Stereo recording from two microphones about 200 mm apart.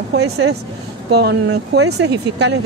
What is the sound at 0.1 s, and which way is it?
Speech, 60° right (ahead or behind).